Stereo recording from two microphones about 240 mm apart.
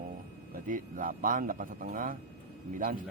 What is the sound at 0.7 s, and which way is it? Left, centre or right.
A man's voice, right.